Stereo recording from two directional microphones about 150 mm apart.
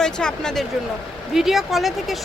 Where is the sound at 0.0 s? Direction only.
5° left (ahead or behind).